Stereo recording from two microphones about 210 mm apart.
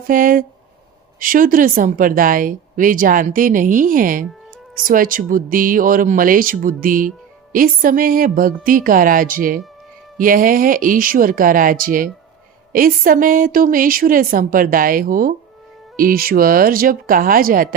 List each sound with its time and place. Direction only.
0.1 s a woman's voice: 40° right (ahead or behind)